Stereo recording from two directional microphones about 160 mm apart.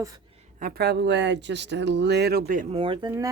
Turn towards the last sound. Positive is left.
turn(degrees=-25)  # may be behind; listen again after turning